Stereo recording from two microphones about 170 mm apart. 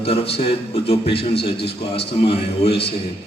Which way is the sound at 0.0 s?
35° left (ahead or behind).